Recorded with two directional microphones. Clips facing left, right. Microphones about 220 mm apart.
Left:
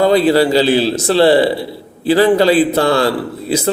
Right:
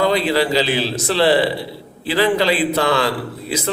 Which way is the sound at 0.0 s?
40° left (ahead or behind).